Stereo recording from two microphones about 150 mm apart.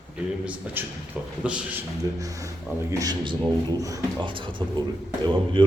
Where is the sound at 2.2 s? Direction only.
20° right (ahead or behind).